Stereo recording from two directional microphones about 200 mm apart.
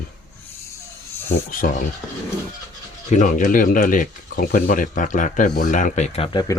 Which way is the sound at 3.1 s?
40° left (ahead or behind).